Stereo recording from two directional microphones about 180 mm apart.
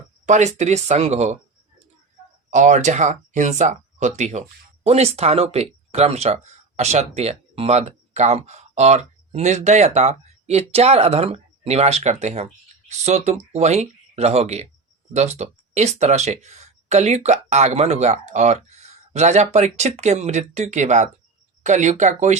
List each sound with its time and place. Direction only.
0.3 s speech: 40° right (ahead or behind)
2.5 s speech: 45° right (ahead or behind)